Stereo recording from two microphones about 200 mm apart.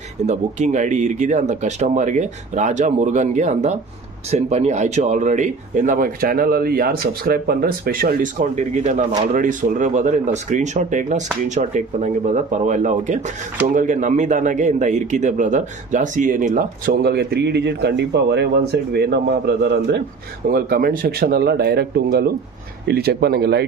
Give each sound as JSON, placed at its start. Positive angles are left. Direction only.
{"t": 0.2, "sound": "a man's voice", "side_deg": -35}